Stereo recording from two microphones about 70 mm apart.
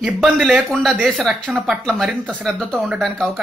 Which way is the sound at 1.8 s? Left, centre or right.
Centre.